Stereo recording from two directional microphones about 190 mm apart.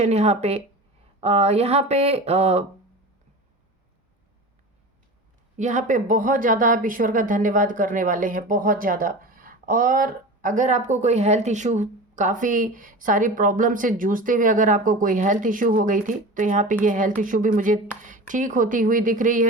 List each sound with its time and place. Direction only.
0.0 s speech: 35° right (ahead or behind)
5.5 s speech: 40° right (ahead or behind)